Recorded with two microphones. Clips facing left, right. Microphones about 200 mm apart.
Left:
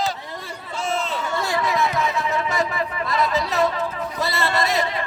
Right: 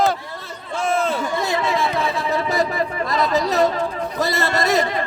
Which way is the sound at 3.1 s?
40° right (ahead or behind).